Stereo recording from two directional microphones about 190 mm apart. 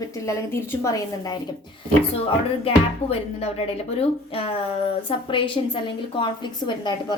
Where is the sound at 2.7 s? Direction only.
30° left (ahead or behind).